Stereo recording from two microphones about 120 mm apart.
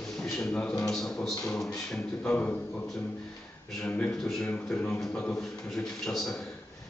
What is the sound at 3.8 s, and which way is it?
A man's voice, 10° left (ahead or behind).